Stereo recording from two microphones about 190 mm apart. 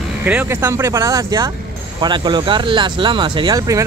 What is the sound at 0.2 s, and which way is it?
Speech, 10° right (ahead or behind).